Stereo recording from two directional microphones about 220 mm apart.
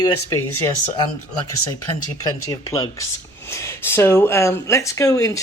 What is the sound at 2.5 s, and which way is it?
Speech, 15° left (ahead or behind).